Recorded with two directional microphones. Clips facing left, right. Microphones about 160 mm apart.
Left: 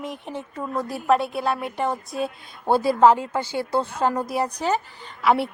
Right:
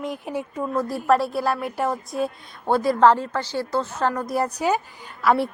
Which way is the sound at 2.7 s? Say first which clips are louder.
Even; 30° left (ahead or behind).